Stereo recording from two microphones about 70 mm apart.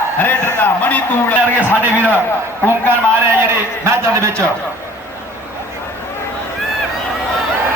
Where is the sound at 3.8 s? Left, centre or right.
Right.